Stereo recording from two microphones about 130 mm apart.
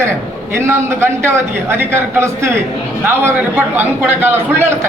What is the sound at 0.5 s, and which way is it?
A man's voice, 20° right (ahead or behind).